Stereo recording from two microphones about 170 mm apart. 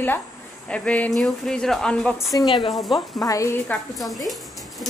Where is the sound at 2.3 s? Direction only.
25° left (ahead or behind).